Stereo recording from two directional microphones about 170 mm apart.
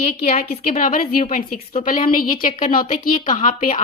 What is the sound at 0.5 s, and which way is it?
A woman's voice, 50° left (ahead or behind).